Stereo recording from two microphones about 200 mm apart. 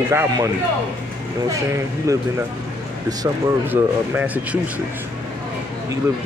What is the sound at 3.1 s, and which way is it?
Speech, 15° right (ahead or behind).